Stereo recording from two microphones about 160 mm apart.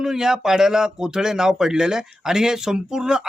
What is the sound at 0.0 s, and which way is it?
Speech, 5° right (ahead or behind).